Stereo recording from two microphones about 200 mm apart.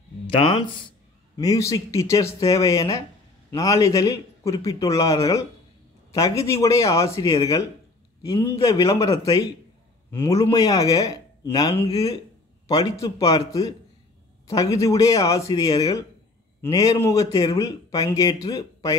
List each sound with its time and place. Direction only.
0.5 s a man's voice: 25° left (ahead or behind)